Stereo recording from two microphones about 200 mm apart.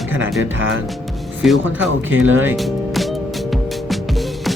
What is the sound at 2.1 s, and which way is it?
Speech, 85° right.